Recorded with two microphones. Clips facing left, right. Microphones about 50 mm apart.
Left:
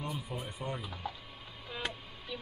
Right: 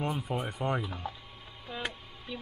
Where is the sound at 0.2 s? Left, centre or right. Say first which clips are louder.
Right 7 dB; right.